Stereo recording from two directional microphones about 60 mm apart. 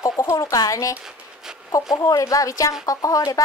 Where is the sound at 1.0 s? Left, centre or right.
Centre.